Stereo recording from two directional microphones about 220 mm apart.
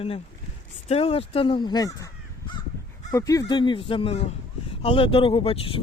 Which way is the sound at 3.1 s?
15° left (ahead or behind).